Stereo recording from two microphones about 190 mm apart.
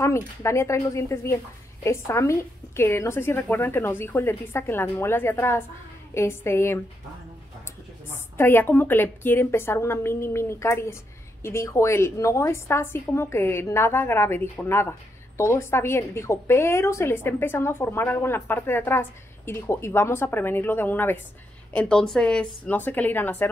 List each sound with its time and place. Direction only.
0.0 s a woman's voice: 15° left (ahead or behind)
8.1 s a woman's voice: 15° left (ahead or behind)